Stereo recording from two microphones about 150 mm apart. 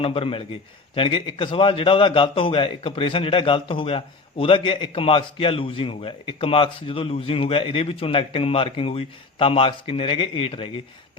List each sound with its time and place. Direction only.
0.0 s a man's voice: 40° left (ahead or behind)